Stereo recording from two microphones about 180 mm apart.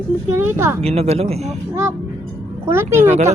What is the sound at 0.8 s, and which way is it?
Speech, 35° right (ahead or behind).